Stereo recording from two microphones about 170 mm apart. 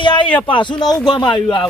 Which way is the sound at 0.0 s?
30° left (ahead or behind).